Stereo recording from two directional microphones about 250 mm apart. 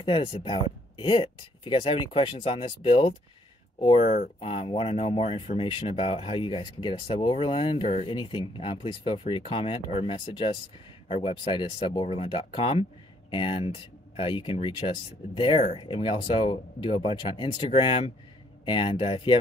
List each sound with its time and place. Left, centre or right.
0.0 s speech: left